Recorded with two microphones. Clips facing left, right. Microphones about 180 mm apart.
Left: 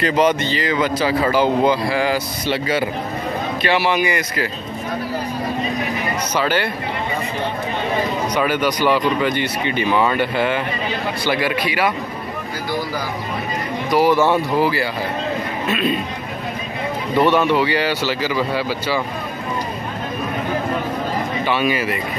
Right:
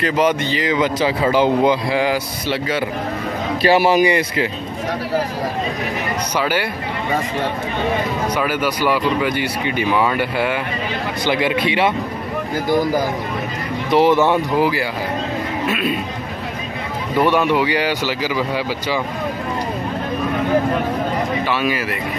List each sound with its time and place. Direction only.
0.0 s speech: 5° right (ahead or behind)
2.4 s a man's voice: centre (ahead or behind)
3.6 s speech: 40° right (ahead or behind)
6.3 s speech: 10° right (ahead or behind)
8.4 s speech: 5° right (ahead or behind)
11.2 s speech: 20° right (ahead or behind)
13.8 s speech: 25° right (ahead or behind)
17.2 s speech: 10° right (ahead or behind)
21.5 s speech: centre (ahead or behind)